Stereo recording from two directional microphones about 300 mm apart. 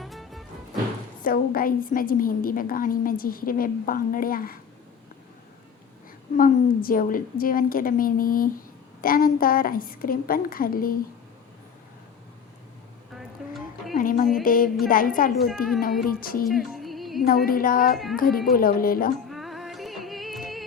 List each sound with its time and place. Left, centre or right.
0.0 s music: centre
1.2 s a woman's voice: left
6.3 s a woman's voice: left
13.1 s music: centre
13.9 s music: left
14.4 s a woman's voice: left
16.5 s music: centre
17.2 s a woman's voice: left
17.9 s speech: centre
18.2 s a woman's voice: left
19.3 s music: centre